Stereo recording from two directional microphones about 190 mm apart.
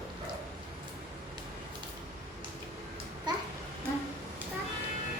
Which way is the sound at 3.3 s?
20° right (ahead or behind).